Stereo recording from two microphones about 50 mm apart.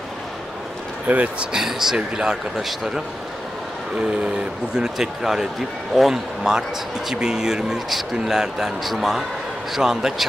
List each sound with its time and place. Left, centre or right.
1.0 s speech: right
1.5 s a man's voice: centre
2.5 s a man's voice: centre
4.7 s a man's voice: centre